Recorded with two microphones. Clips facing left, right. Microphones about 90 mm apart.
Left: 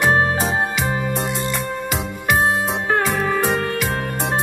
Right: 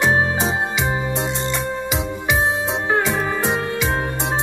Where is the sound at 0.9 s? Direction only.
20° right (ahead or behind).